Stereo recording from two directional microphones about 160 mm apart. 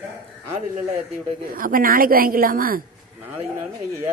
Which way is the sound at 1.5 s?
60° right (ahead or behind).